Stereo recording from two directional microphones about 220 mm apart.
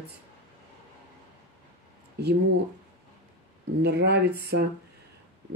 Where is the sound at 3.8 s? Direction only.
50° right (ahead or behind).